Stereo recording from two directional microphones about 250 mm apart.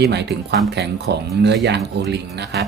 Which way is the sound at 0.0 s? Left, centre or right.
Right.